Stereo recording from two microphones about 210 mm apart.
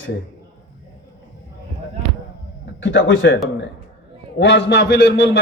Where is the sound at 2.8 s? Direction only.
65° left (ahead or behind).